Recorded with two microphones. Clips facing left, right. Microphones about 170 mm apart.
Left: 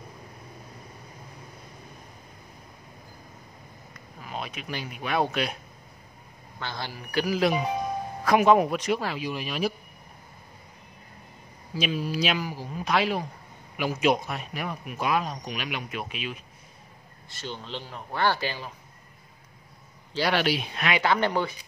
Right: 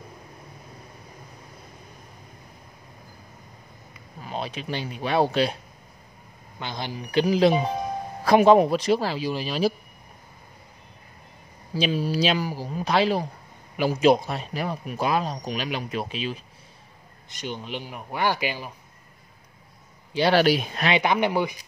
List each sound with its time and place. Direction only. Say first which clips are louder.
4.2 s speech: right 4 dB; 30° right (ahead or behind)
6.6 s speech: right 3 dB; 20° right (ahead or behind)
11.7 s speech: right 4 dB; 30° right (ahead or behind)
17.3 s a man's voice: right 4 dB; 15° right (ahead or behind)
20.2 s speech: right 6 dB; 40° right (ahead or behind)
20.8 s a man's voice: right 2 dB; 20° right (ahead or behind)